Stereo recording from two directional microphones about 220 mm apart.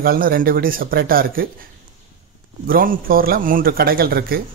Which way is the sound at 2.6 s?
40° right (ahead or behind).